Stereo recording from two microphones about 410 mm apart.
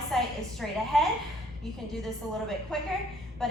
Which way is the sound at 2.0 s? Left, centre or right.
Centre.